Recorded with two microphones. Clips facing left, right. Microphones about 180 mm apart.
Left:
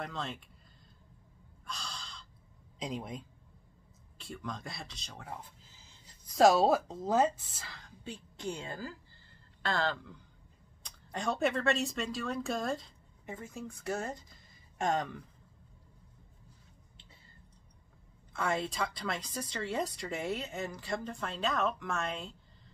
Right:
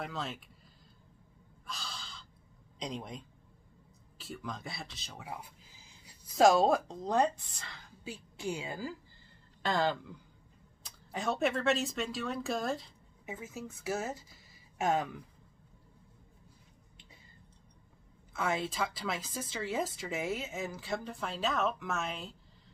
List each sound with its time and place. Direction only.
0.0 s speech: 5° right (ahead or behind)
1.7 s gasp: centre (ahead or behind)
2.8 s speech: 5° left (ahead or behind)
4.2 s a sound: 5° right (ahead or behind)
6.3 s speech: centre (ahead or behind)
10.8 s speech: 5° right (ahead or behind)
18.3 s speech: centre (ahead or behind)